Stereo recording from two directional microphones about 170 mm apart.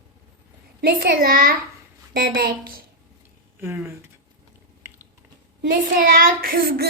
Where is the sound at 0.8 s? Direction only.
65° right (ahead or behind).